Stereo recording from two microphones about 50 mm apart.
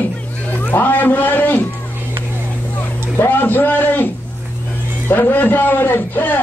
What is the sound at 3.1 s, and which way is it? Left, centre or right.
Speech, left.